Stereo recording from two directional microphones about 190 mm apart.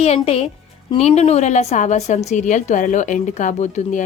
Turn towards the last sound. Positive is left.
turn(degrees=40)  # may be behind; listen again after turning